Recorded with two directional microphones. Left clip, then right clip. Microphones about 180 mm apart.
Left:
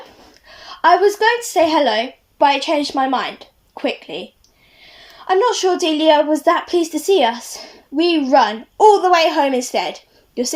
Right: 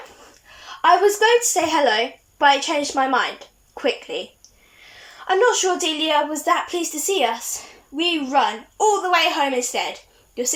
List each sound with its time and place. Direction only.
0.8 s a woman's voice: 30° left (ahead or behind)
5.2 s a woman's voice: 30° left (ahead or behind)